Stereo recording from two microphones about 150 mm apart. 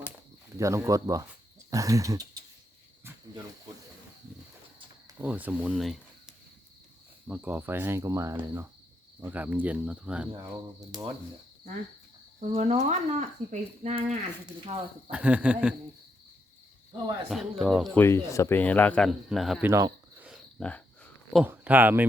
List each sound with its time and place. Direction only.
0.5 s speech: 20° right (ahead or behind)
5.2 s speech: 10° right (ahead or behind)
7.3 s cricket: 10° right (ahead or behind)
12.5 s speech: 45° right (ahead or behind)
15.1 s cricket: 10° right (ahead or behind)
17.2 s speech: centre (ahead or behind)
17.9 s speech: 15° left (ahead or behind); by 19.6 s centre (ahead or behind)
19.6 s cricket: 15° right (ahead or behind)
20.6 s a sound: 10° left (ahead or behind)
21.4 s speech: 10° right (ahead or behind)